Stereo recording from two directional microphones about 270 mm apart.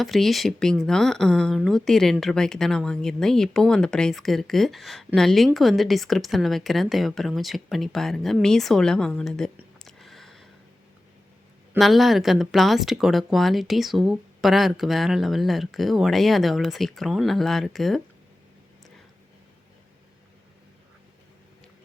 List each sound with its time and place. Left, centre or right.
0.0 s speech: centre
11.7 s speech: centre